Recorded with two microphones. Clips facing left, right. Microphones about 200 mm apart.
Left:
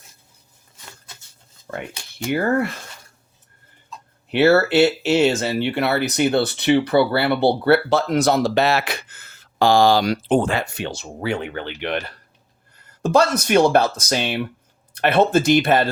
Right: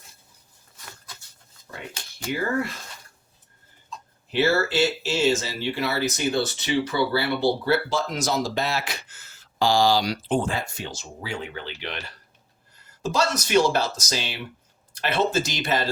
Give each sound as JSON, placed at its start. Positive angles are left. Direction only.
{"t": 1.7, "sound": "speech", "side_deg": 60}
{"t": 4.3, "sound": "speech", "side_deg": 65}